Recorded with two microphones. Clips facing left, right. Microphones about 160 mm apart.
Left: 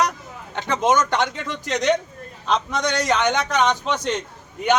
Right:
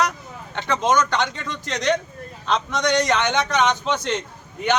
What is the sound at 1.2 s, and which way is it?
A man's voice, 5° left (ahead or behind).